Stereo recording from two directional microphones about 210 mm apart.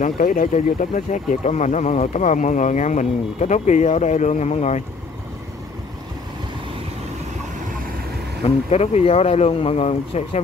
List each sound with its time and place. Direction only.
0.0 s speech: 40° left (ahead or behind)
8.5 s speech: 30° left (ahead or behind)